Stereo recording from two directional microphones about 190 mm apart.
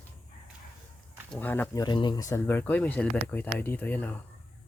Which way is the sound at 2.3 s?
10° left (ahead or behind).